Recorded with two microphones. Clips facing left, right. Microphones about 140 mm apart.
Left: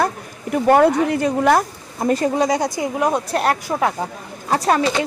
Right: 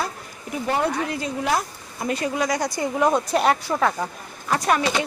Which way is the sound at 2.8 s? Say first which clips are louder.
Left 1 dB; 5° left (ahead or behind).